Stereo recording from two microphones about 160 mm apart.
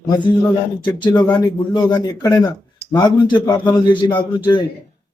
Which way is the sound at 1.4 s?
25° left (ahead or behind).